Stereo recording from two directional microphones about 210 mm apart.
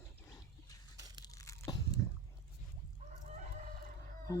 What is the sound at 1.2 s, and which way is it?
Crunch, 15° left (ahead or behind).